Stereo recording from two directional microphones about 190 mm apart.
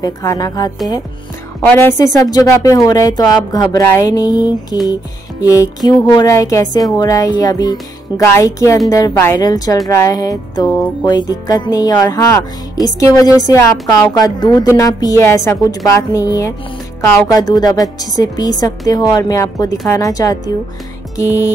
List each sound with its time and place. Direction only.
0.0 s a woman's voice: 15° left (ahead or behind)
1.7 s a woman's voice: 10° left (ahead or behind)